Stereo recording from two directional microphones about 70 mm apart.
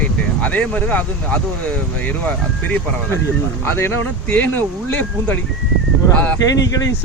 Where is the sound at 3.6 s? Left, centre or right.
Left.